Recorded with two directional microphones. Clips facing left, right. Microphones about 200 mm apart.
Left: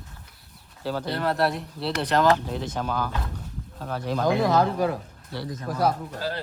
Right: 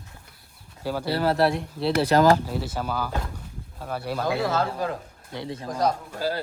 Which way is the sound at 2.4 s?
5° right (ahead or behind).